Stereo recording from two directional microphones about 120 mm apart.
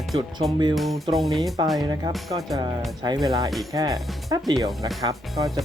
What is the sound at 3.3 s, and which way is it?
Speech, 30° right (ahead or behind).